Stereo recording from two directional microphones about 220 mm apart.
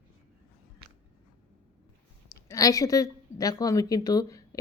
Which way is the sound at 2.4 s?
15° left (ahead or behind).